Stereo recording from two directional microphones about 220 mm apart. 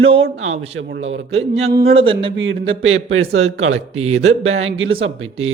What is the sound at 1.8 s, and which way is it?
Speech, 25° right (ahead or behind).